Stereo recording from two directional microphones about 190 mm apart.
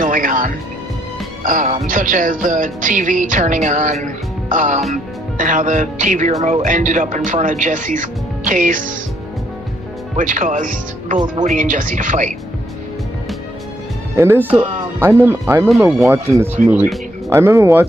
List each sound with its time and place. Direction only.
0.0 s music: 45° right (ahead or behind)
4.9 s speech: 45° right (ahead or behind)
7.2 s music: 40° right (ahead or behind)
10.1 s music: 45° right (ahead or behind)
14.1 s speech: 15° right (ahead or behind)
16.6 s music: 45° right (ahead or behind)
17.3 s speech: 15° right (ahead or behind)